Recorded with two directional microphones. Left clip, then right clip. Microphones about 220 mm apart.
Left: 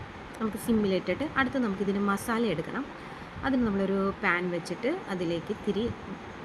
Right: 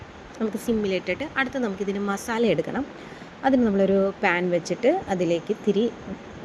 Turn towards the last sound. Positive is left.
turn(degrees=-10)  # may be behind; listen again after turning